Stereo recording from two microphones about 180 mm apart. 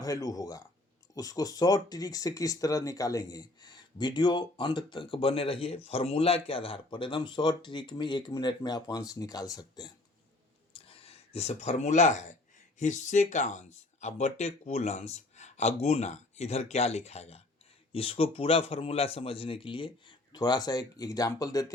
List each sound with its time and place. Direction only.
0.0 s speech: 20° left (ahead or behind)
10.7 s a sound: 30° left (ahead or behind)
12.8 s speech: 40° left (ahead or behind); by 21.7 s 20° left (ahead or behind)